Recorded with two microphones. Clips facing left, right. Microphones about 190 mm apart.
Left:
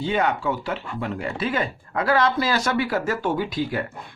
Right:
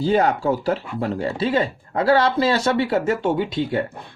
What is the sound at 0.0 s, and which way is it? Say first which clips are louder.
Speech: right 4 dB; 35° right (ahead or behind).